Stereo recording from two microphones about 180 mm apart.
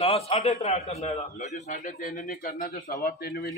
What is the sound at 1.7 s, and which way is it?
A man's voice, 50° left (ahead or behind).